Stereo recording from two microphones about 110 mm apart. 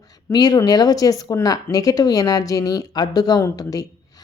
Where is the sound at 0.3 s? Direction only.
40° left (ahead or behind).